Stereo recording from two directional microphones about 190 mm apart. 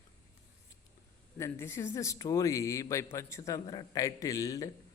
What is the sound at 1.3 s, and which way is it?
Speech, 15° left (ahead or behind).